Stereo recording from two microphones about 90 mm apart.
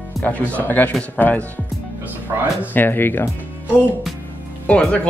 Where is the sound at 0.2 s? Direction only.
15° left (ahead or behind).